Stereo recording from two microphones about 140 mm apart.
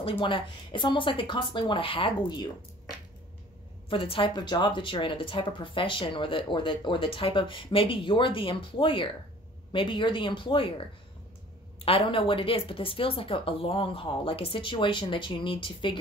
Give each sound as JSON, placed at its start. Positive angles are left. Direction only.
{"t": 0.2, "sound": "speech", "side_deg": 35}
{"t": 3.9, "sound": "speech", "side_deg": 40}
{"t": 11.8, "sound": "speech", "side_deg": 40}